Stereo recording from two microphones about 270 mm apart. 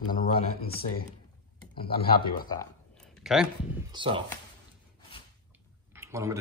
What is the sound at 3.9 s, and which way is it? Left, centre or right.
Speech, centre.